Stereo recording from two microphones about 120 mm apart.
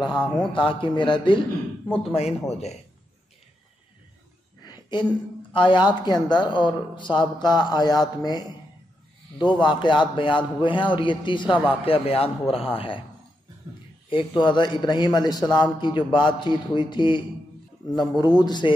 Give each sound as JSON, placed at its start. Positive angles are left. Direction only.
{"t": 0.0, "sound": "speech", "side_deg": 40}
{"t": 1.9, "sound": "speech", "side_deg": 55}
{"t": 4.6, "sound": "a sound", "side_deg": 35}
{"t": 5.5, "sound": "a man's voice", "side_deg": 40}
{"t": 11.8, "sound": "speech", "side_deg": 55}
{"t": 14.0, "sound": "a man's voice", "side_deg": 45}
{"t": 18.3, "sound": "a man's voice", "side_deg": 35}